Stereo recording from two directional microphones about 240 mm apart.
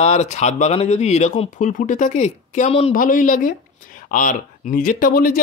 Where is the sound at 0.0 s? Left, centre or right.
Left.